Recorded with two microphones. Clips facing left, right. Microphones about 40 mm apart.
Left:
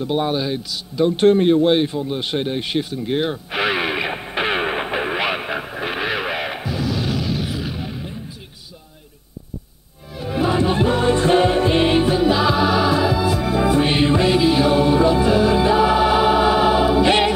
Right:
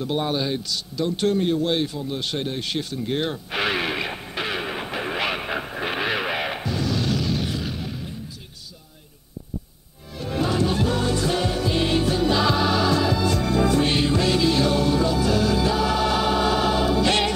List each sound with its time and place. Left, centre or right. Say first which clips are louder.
0.0 s a man's voice: left 4 dB; centre
0.9 s a sound: left 8 dB; left
10.1 s music: left 4 dB; centre